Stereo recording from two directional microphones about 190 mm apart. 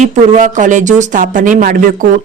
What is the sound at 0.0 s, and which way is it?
Speech, 40° right (ahead or behind).